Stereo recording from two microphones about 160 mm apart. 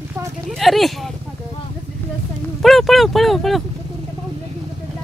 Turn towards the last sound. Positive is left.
turn(degrees=0)  # may be behind; listen again after turning